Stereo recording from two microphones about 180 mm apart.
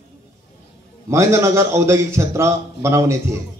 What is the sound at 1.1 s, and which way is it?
A man's voice, 15° right (ahead or behind).